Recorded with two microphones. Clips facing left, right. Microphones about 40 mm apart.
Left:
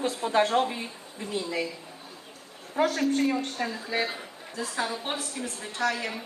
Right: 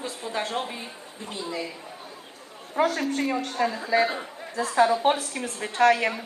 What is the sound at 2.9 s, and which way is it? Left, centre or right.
Speech, centre.